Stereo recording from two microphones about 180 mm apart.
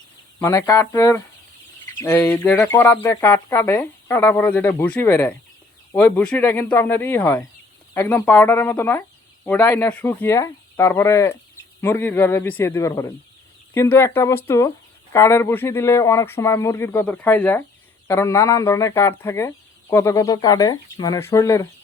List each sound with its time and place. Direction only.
0.3 s speech: 15° left (ahead or behind)